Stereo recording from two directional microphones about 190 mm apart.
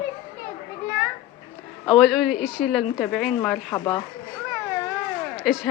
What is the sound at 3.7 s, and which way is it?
Speech, 20° left (ahead or behind).